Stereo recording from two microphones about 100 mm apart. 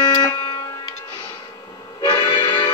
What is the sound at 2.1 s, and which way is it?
Music, 45° left (ahead or behind).